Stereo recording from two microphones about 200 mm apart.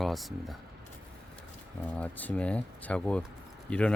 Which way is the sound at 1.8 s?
5° left (ahead or behind).